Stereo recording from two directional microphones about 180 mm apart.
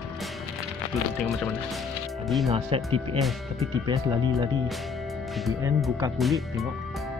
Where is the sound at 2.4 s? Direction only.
30° right (ahead or behind).